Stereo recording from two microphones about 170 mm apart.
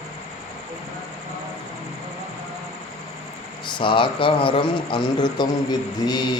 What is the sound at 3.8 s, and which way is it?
Speech, 30° left (ahead or behind).